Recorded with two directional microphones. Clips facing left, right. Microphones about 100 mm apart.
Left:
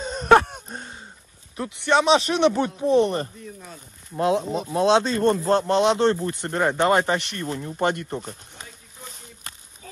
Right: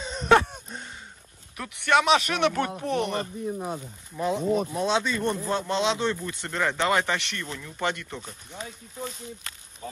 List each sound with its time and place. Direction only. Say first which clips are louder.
0.0 s wheeze: left 4 dB; 50° left (ahead or behind)
1.6 s speech: left 2 dB; 25° left (ahead or behind)
3.5 s speech: right 10 dB; 65° right (ahead or behind)
4.2 s speech: left 2 dB; 75° left (ahead or behind); by 6.1 s 60° left (ahead or behind)
6.3 s speech: left 5 dB; 50° left (ahead or behind)